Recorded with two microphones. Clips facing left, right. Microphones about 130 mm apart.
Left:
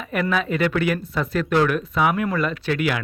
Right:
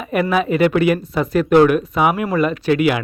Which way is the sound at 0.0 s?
10° right (ahead or behind).